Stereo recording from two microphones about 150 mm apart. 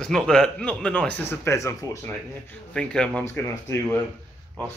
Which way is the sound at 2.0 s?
5° left (ahead or behind).